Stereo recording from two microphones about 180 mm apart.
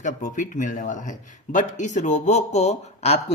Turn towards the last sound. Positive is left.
turn(degrees=40)  # may be behind; listen again after turning